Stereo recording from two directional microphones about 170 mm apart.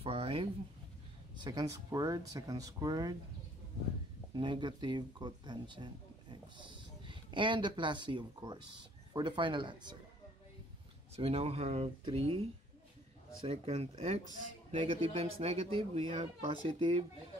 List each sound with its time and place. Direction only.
0.0 s a sound: 35° right (ahead or behind)
1.4 s speech: 25° right (ahead or behind)
4.3 s speech: 25° right (ahead or behind)
11.1 s speech: 35° right (ahead or behind)
13.5 s speech: 35° right (ahead or behind)